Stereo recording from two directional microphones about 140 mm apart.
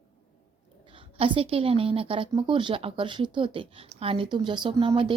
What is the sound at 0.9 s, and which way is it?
A woman's voice, 40° right (ahead or behind).